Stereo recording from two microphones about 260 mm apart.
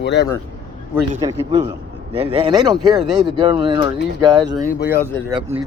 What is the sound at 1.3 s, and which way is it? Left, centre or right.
A man's voice, right.